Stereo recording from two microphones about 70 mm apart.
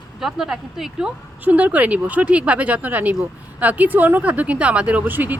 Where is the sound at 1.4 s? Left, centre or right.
Right.